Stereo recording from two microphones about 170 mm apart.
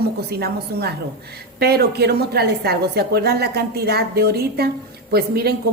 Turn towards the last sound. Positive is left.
turn(degrees=-65)  # may be behind; listen again after turning